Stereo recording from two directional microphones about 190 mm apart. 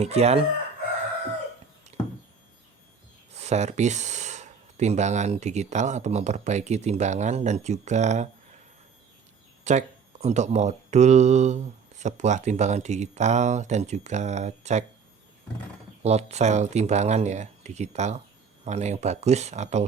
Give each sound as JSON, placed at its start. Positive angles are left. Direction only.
{"t": 0.0, "sound": "speech", "side_deg": -35}
{"t": 3.3, "sound": "speech", "side_deg": -35}
{"t": 9.6, "sound": "speech", "side_deg": -35}
{"t": 16.0, "sound": "speech", "side_deg": -35}